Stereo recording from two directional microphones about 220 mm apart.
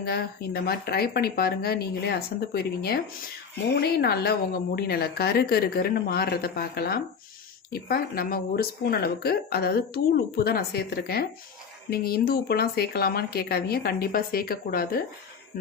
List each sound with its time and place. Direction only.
0.0 s speech: 45° left (ahead or behind)